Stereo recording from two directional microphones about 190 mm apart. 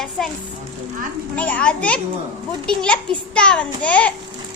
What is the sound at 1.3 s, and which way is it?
A child's voice, 5° left (ahead or behind).